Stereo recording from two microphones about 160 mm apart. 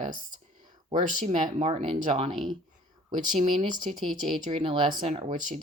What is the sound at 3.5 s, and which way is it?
Speech, 30° right (ahead or behind).